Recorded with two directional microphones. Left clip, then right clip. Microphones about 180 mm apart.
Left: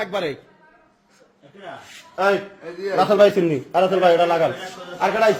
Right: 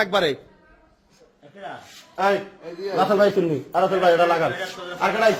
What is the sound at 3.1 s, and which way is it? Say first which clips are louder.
A man's voice: left 5 dB; 25° left (ahead or behind).